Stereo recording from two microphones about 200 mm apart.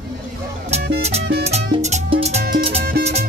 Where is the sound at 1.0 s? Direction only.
30° right (ahead or behind).